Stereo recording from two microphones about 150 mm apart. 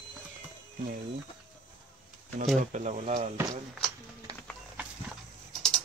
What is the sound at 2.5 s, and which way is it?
Speech, 55° right (ahead or behind).